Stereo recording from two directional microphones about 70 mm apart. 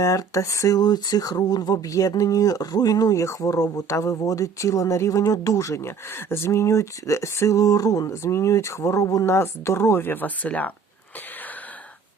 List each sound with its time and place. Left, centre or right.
0.0 s speech: left
0.8 s speech: left
8.1 s speech: left